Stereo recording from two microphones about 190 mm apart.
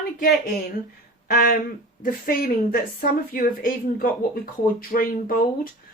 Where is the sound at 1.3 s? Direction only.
50° left (ahead or behind).